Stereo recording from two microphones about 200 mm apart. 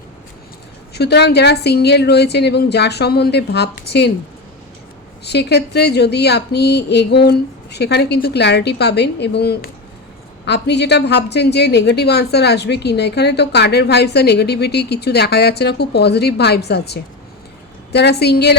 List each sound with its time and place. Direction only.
0.9 s a woman's voice: 55° left (ahead or behind)
5.2 s a woman's voice: 55° left (ahead or behind)